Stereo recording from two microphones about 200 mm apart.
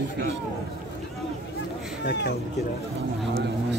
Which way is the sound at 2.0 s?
55° left (ahead or behind).